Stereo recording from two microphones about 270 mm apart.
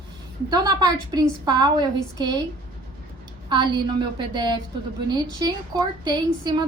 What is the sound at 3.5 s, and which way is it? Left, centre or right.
A woman's voice, centre.